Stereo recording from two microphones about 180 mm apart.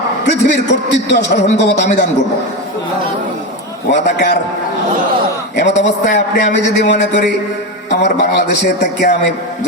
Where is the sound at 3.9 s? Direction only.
75° left (ahead or behind).